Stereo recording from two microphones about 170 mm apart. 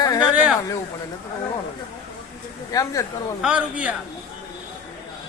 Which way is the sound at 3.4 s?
5° right (ahead or behind).